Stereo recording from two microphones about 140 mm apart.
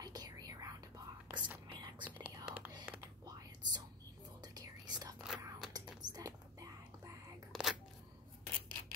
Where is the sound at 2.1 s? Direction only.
15° right (ahead or behind).